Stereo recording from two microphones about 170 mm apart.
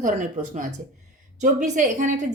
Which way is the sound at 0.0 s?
45° right (ahead or behind).